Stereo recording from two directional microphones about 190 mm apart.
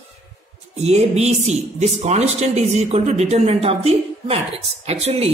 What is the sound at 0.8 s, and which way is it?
A woman's voice, 35° right (ahead or behind).